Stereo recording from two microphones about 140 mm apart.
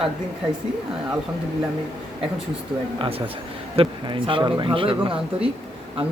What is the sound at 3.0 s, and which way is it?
Speech, 40° right (ahead or behind).